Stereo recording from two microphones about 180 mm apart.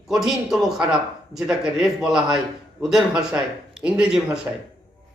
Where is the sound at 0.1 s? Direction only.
Centre (ahead or behind).